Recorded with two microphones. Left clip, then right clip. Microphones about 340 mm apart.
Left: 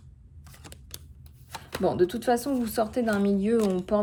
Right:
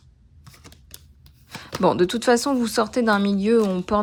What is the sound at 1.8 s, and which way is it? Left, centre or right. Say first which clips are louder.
Speech: right 6 dB; centre.